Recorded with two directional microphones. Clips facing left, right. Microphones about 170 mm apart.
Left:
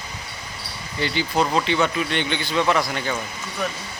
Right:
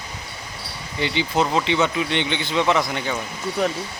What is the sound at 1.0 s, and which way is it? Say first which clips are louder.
Speech: right 1 dB; 20° right (ahead or behind).